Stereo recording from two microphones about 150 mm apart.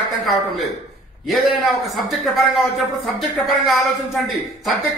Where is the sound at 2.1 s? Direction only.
Centre (ahead or behind).